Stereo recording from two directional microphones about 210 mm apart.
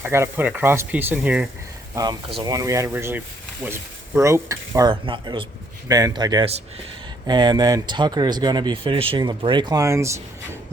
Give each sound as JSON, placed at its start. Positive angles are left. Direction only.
{"t": 0.0, "sound": "speech", "side_deg": -10}
{"t": 2.0, "sound": "speech", "side_deg": -20}